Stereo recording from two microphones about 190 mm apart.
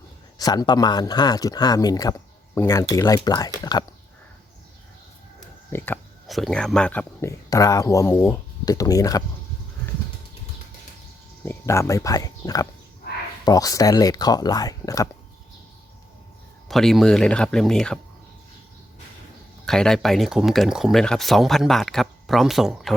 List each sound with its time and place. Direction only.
0.3 s speech: 20° left (ahead or behind)
5.7 s a sound: 10° left (ahead or behind)
6.3 s speech: centre (ahead or behind); by 9.2 s 20° left (ahead or behind)
11.4 s speech: 15° left (ahead or behind)
16.6 s speech: centre (ahead or behind)
19.6 s speech: 5° left (ahead or behind)